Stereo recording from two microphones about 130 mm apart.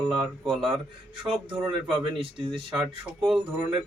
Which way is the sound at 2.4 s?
45° right (ahead or behind).